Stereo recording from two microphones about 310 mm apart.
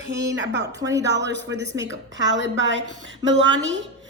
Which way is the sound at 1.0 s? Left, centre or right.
Right.